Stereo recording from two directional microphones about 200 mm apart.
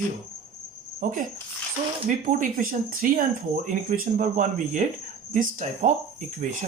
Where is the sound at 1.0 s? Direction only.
40° right (ahead or behind).